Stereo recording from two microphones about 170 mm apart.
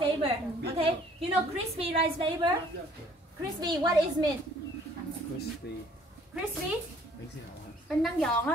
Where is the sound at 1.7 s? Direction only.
35° right (ahead or behind).